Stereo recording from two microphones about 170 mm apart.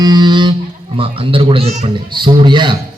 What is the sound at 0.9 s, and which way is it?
A man's voice, 30° right (ahead or behind).